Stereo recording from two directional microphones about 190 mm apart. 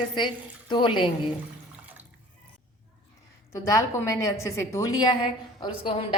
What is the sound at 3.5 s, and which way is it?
A woman's voice, 15° left (ahead or behind).